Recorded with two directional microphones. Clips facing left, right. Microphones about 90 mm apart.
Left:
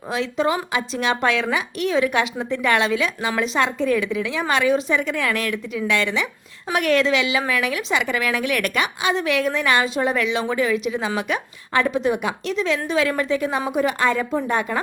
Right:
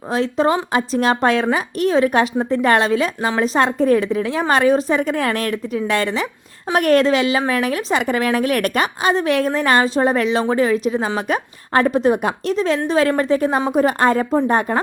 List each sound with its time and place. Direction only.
0.1 s a woman's voice: 40° right (ahead or behind)